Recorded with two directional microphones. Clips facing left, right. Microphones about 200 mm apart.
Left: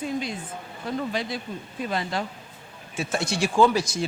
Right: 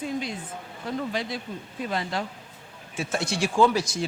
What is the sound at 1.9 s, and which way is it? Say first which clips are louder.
Speech: left 1 dB; 15° left (ahead or behind).